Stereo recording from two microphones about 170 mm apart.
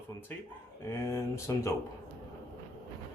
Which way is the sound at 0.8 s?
15° left (ahead or behind).